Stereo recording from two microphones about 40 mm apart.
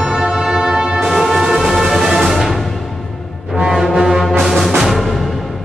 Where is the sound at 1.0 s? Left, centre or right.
Centre.